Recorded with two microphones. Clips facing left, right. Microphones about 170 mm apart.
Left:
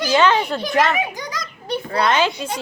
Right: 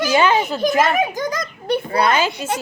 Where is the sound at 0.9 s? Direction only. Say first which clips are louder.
Right 5 dB; 45° right (ahead or behind).